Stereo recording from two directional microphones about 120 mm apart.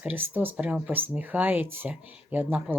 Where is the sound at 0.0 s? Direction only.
15° right (ahead or behind).